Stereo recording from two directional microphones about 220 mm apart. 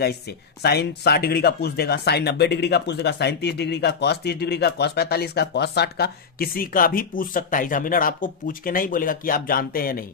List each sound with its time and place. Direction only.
0.0 s speech: 45° left (ahead or behind)